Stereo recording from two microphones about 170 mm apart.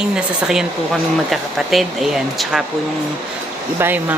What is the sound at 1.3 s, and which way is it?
Speech, centre (ahead or behind).